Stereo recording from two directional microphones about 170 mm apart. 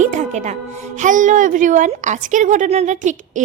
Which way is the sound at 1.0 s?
45° right (ahead or behind).